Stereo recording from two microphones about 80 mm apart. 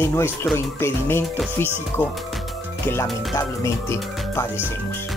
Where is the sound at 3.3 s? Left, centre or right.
Left.